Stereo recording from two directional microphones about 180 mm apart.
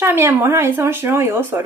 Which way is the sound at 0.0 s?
10° right (ahead or behind).